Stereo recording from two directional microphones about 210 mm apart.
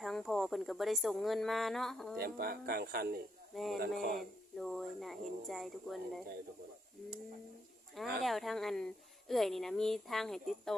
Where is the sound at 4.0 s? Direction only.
45° right (ahead or behind).